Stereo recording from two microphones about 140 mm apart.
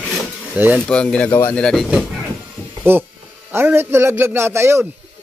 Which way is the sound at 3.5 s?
15° right (ahead or behind).